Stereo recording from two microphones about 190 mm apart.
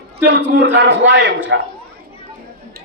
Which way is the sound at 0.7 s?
65° right (ahead or behind).